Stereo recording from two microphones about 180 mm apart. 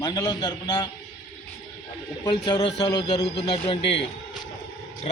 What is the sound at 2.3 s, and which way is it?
A man's voice, 25° left (ahead or behind).